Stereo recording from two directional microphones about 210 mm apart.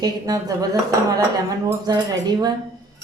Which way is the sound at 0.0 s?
15° right (ahead or behind).